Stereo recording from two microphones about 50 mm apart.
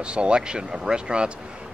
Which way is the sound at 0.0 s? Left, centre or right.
Right.